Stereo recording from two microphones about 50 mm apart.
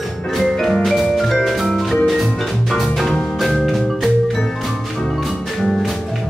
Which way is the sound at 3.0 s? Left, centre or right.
Centre.